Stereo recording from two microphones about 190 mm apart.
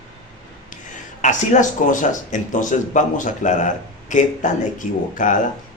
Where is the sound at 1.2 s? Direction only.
40° left (ahead or behind).